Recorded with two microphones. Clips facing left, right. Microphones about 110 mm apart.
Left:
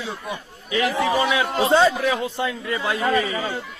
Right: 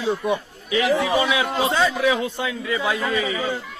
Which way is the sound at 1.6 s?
30° left (ahead or behind).